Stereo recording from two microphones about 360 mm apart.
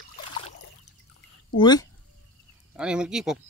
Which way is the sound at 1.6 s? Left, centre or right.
Centre.